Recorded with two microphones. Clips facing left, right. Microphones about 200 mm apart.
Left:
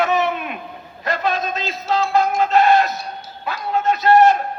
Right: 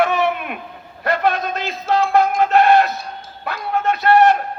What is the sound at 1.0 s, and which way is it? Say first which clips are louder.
A man's voice: right 3 dB; 60° right (ahead or behind).